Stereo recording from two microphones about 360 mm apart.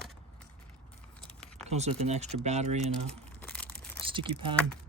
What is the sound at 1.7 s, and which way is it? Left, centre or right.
Speech, centre.